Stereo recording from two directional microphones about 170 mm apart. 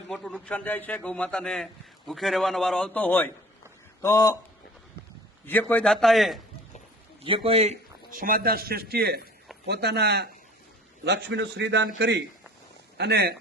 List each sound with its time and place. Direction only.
0.1 s a man's voice: 5° left (ahead or behind)
5.5 s a man's voice: 10° left (ahead or behind)
7.3 s a man's voice: 35° right (ahead or behind)
8.1 s a man's voice: 55° right (ahead or behind); by 10.2 s 75° right (ahead or behind)
11.0 s a man's voice: 90° right
13.0 s speech: 70° right (ahead or behind)